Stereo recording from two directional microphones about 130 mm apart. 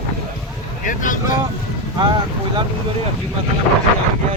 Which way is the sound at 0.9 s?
90° left.